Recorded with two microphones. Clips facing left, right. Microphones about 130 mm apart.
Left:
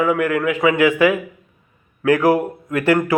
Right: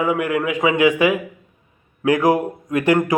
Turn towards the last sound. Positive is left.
turn(degrees=-20)  # may be behind; listen again after turning